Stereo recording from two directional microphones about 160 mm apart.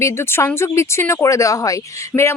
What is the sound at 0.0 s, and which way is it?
Speech, 15° left (ahead or behind).